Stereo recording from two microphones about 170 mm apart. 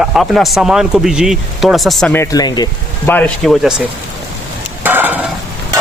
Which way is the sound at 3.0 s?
10° left (ahead or behind).